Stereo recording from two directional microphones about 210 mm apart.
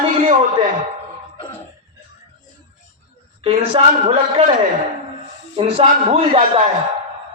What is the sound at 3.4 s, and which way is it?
A man's voice, 25° right (ahead or behind).